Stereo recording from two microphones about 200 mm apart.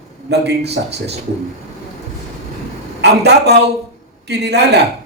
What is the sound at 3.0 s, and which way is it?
A woman's voice, 55° right (ahead or behind).